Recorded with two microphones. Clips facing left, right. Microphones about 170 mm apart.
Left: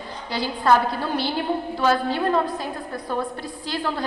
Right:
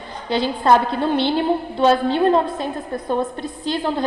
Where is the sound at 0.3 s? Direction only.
25° right (ahead or behind).